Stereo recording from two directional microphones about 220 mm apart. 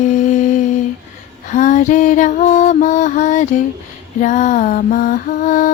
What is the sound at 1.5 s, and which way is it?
Music, 35° left (ahead or behind).